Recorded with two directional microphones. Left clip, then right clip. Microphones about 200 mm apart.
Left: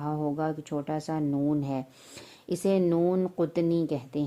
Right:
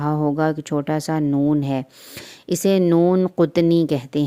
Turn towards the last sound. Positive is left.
turn(degrees=-30)  # may be behind; listen again after turning